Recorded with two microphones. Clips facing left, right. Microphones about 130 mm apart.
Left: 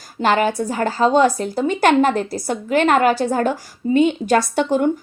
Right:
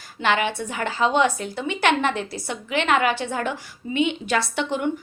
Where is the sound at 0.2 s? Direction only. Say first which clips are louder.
Left 5 dB; 40° left (ahead or behind).